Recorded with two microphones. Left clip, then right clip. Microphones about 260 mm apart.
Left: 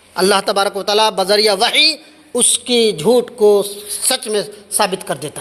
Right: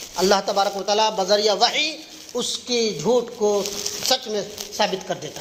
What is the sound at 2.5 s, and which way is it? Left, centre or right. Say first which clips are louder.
Speech: left 9 dB; left.